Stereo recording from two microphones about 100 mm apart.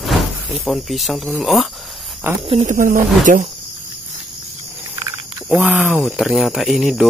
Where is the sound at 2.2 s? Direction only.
25° right (ahead or behind).